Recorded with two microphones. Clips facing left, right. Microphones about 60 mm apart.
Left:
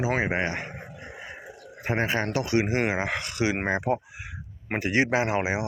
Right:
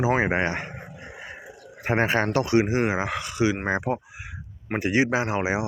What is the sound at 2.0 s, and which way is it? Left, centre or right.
Speech, right.